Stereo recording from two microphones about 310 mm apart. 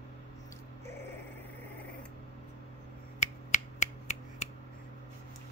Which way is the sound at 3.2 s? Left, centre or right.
Left.